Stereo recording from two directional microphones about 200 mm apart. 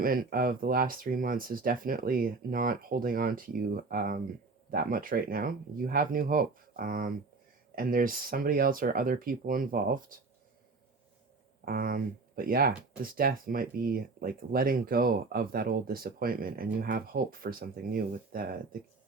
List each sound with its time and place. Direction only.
0.0 s speech: 45° right (ahead or behind)
11.6 s speech: 45° right (ahead or behind)